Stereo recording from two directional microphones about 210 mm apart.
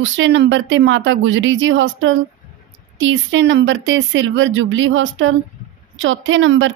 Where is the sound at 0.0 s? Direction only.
60° right (ahead or behind).